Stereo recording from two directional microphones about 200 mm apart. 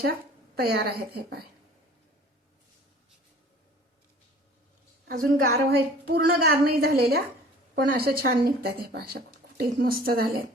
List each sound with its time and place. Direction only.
0.5 s a woman's voice: 50° right (ahead or behind)
5.0 s a woman's voice: 50° right (ahead or behind)